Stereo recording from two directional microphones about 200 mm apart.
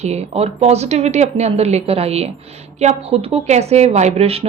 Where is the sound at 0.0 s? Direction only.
35° right (ahead or behind).